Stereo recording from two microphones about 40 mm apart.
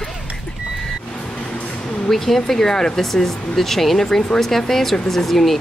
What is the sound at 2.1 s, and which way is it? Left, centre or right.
Speech, centre.